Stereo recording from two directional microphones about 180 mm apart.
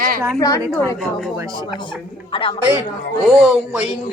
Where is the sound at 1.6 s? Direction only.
30° left (ahead or behind).